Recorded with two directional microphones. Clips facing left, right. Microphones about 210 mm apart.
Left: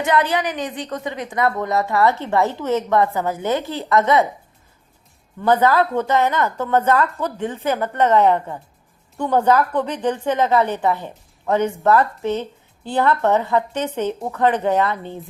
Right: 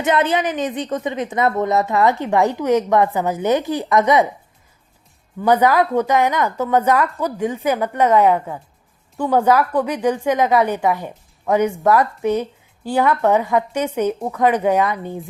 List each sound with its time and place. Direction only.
0.0 s a woman's voice: 20° right (ahead or behind)
5.4 s a woman's voice: 15° right (ahead or behind)